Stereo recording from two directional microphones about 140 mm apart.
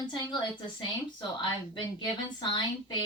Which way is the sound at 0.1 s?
35° left (ahead or behind).